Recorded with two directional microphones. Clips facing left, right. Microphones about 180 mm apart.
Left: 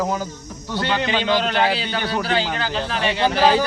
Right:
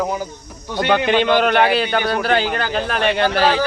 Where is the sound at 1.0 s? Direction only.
55° right (ahead or behind).